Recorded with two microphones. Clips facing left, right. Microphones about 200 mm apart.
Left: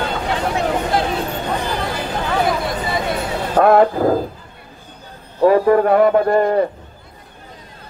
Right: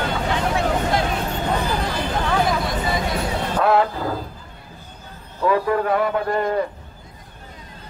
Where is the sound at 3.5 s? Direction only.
50° left (ahead or behind).